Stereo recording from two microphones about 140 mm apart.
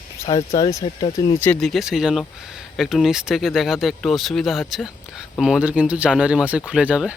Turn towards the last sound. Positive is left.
turn(degrees=-10)  # may be behind; listen again after turning